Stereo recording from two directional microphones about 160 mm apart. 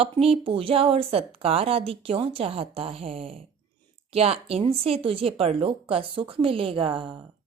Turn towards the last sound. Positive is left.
turn(degrees=-30)  # may be behind; listen again after turning